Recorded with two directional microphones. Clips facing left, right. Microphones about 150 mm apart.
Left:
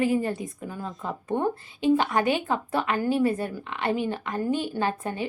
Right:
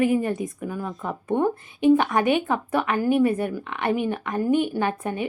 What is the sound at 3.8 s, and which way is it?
A woman's voice, 20° right (ahead or behind).